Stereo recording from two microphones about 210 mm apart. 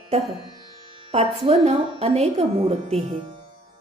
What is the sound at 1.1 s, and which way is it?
A woman's voice, 30° right (ahead or behind).